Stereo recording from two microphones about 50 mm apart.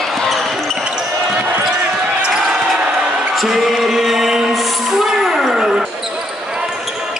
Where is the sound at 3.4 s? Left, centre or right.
Centre.